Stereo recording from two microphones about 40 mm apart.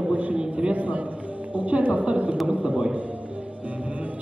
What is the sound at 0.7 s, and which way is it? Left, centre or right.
A woman's voice, right.